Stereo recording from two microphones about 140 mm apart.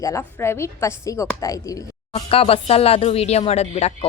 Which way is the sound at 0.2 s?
15° left (ahead or behind).